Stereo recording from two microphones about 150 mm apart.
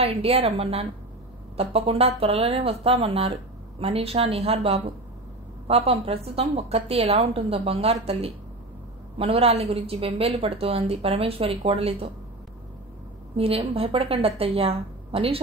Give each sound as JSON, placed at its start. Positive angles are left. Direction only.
{"t": 0.0, "sound": "a woman's voice", "side_deg": -40}
{"t": 13.4, "sound": "a woman's voice", "side_deg": -40}